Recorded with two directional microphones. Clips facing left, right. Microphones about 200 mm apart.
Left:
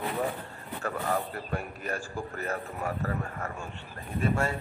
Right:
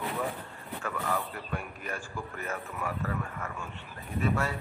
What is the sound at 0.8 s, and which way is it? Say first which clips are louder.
A man's voice: left 3 dB; 40° left (ahead or behind).